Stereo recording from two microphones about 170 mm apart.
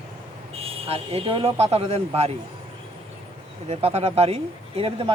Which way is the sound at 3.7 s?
35° right (ahead or behind).